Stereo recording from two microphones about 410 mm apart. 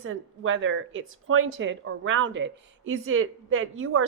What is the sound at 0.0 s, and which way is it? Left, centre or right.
Speech, right.